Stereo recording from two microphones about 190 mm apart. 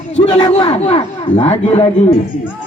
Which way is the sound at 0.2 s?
25° left (ahead or behind).